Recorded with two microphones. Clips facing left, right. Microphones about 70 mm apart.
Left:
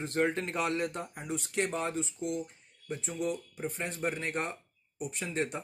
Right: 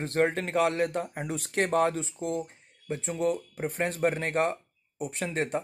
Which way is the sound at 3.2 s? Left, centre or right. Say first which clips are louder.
Right 7 dB; right.